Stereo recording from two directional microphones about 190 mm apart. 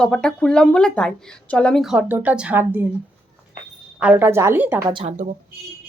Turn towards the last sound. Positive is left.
turn(degrees=-40)  # may be behind; listen again after turning